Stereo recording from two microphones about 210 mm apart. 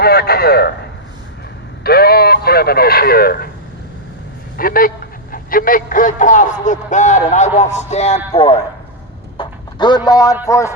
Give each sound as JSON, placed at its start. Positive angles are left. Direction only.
{"t": 0.0, "sound": "speech", "side_deg": 45}
{"t": 1.8, "sound": "speech", "side_deg": 45}
{"t": 4.5, "sound": "a man's voice", "side_deg": 45}
{"t": 9.4, "sound": "clip-clop", "side_deg": 20}
{"t": 10.4, "sound": "speech", "side_deg": 15}